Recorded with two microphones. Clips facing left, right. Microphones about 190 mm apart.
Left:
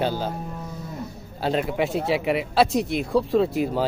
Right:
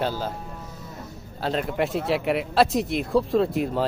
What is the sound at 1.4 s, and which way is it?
Speech, 5° left (ahead or behind).